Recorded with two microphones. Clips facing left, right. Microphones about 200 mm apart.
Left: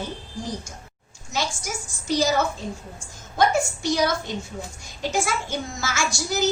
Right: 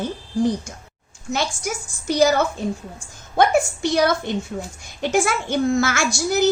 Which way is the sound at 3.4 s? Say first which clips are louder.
Right 4 dB; 60° right (ahead or behind).